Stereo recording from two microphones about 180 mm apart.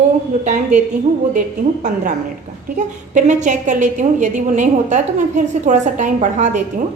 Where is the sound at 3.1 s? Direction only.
40° right (ahead or behind).